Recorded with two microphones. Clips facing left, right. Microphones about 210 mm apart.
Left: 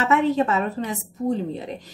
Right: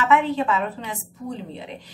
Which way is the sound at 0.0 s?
40° left (ahead or behind).